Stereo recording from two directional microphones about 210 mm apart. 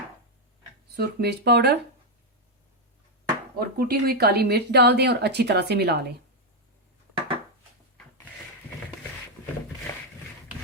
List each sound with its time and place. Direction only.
0.9 s a woman's voice: 50° right (ahead or behind)
3.6 s a woman's voice: 45° right (ahead or behind)
7.1 s dishes: 25° right (ahead or behind)